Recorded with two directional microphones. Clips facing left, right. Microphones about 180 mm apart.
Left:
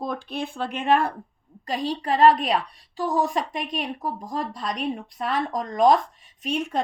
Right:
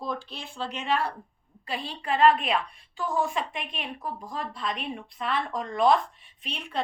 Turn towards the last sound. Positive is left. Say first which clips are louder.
# left 12 dB
turn(degrees=45)  # may be behind; listen again after turning